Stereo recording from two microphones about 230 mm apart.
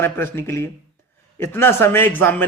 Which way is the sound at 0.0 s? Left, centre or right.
Centre.